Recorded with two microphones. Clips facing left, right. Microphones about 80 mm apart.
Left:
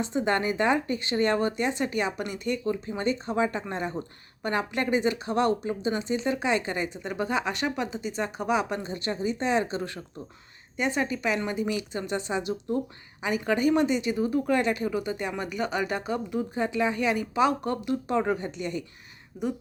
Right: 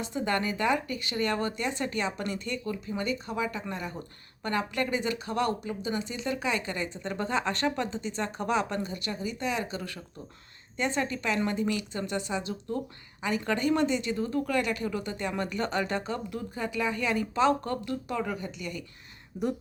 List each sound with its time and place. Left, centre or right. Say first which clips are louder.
0.0 s speech: left 4 dB; left
8.8 s speech: left 4 dB; left
10.8 s speech: left 2 dB; centre
18.2 s speech: left 6 dB; left